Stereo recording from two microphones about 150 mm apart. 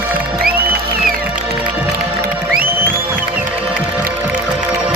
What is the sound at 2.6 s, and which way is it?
Music, 15° right (ahead or behind).